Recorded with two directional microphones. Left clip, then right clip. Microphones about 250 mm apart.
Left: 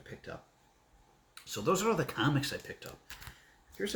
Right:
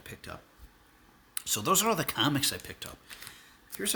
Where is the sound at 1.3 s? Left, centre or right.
Right.